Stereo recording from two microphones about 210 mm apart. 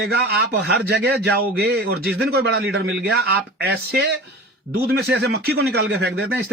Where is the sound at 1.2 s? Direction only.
50° right (ahead or behind).